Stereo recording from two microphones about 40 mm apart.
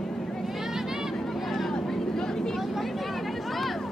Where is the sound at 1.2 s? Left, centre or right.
Centre.